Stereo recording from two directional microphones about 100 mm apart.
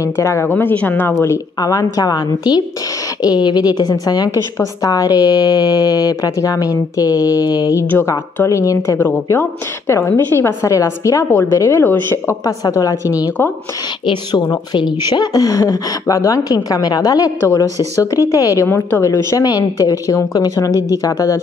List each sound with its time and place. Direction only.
0.0 s a woman's voice: 30° left (ahead or behind)
1.6 s a woman's voice: 40° left (ahead or behind)
7.9 s a woman's voice: 25° left (ahead or behind)
12.4 s a woman's voice: 35° left (ahead or behind)
14.5 s a woman's voice: 50° left (ahead or behind)